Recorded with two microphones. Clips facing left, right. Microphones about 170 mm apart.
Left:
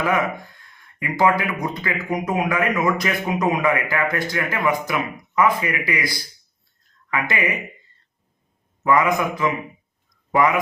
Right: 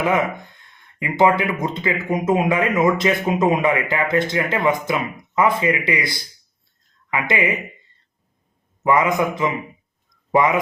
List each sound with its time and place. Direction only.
0.9 s speech: 20° right (ahead or behind)
8.8 s speech: 20° right (ahead or behind)